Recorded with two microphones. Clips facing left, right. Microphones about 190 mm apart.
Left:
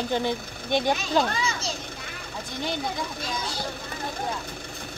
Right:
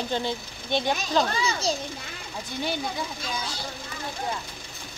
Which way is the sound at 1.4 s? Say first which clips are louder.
Right 3 dB; 35° right (ahead or behind).